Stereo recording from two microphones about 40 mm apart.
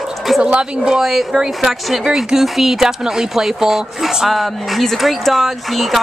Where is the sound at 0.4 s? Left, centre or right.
Right.